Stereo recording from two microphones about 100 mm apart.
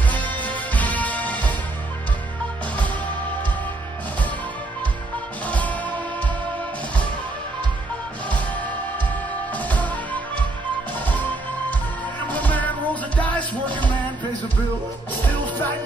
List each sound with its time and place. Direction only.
0.0 s music: 15° left (ahead or behind)
5.5 s music: 15° left (ahead or behind)
8.3 s music: 15° left (ahead or behind)
12.3 s music: 15° left (ahead or behind)
15.2 s music: 15° left (ahead or behind)